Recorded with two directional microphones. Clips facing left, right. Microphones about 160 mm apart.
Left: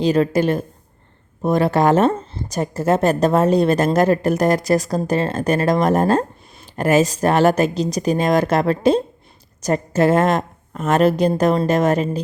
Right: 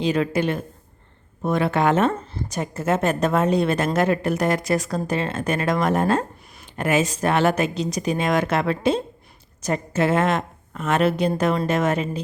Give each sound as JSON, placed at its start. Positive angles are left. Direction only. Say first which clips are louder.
{"t": 0.0, "sound": "a woman's voice", "louder": "left 5 dB", "side_deg": 40}